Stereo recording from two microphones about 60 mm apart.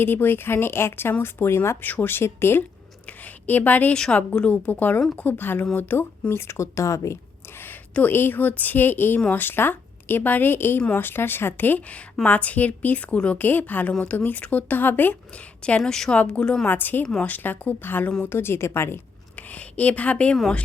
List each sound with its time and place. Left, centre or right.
0.0 s a woman's voice: left
1.8 s a woman's voice: left
3.1 s a sound: left
4.1 s a woman's voice: left
6.3 s speech: left
8.0 s a woman's voice: left
13.4 s a woman's voice: left
15.8 s a woman's voice: centre
16.1 s a woman's voice: left
16.6 s a woman's voice: left
19.4 s a woman's voice: left